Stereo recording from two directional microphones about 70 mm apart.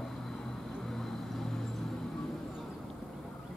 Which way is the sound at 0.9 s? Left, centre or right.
Centre.